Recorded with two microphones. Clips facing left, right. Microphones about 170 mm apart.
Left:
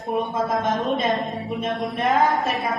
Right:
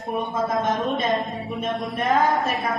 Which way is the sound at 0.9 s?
20° left (ahead or behind).